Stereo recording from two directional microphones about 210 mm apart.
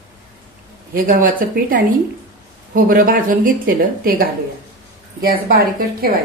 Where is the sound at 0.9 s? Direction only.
40° right (ahead or behind).